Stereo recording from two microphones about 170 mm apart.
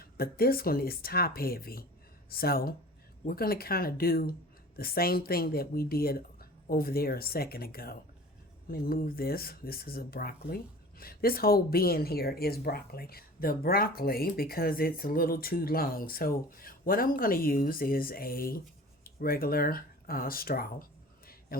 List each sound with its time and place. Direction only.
0.0 s speech: 60° left (ahead or behind)